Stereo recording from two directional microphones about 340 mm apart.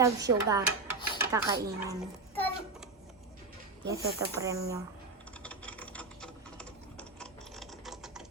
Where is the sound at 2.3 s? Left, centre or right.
Centre.